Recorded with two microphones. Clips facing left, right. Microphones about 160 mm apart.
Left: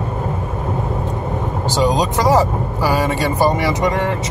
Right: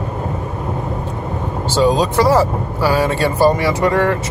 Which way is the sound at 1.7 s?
15° left (ahead or behind).